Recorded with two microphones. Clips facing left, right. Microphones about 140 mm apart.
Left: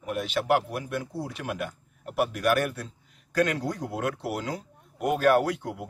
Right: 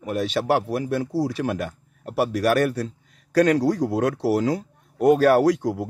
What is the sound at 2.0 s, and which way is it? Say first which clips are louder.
A man's voice: right 4 dB; 35° right (ahead or behind).